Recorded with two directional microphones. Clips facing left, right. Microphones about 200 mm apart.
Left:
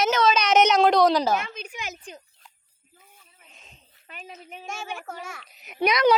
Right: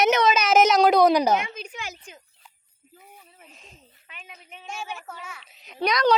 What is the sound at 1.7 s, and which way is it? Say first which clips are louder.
Speech: left 1 dB; 20° left (ahead or behind).